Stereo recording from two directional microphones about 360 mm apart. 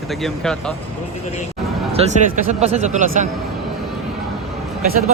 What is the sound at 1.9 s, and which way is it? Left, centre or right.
A man's voice, centre.